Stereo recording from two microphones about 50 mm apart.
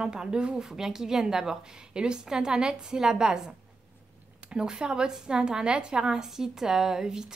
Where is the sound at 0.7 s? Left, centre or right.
Centre.